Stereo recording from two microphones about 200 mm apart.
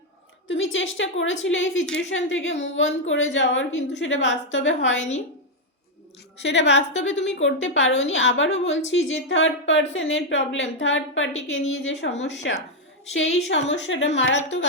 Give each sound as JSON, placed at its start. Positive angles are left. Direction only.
{"t": 0.4, "sound": "a woman's voice", "side_deg": 70}
{"t": 4.9, "sound": "a woman's voice", "side_deg": 35}
{"t": 6.4, "sound": "a woman's voice", "side_deg": 60}